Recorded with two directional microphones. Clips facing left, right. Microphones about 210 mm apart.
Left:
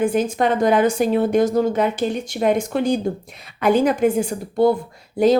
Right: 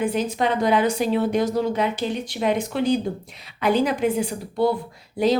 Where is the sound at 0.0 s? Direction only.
50° left (ahead or behind).